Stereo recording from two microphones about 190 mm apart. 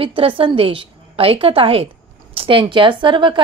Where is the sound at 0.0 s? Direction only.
30° right (ahead or behind).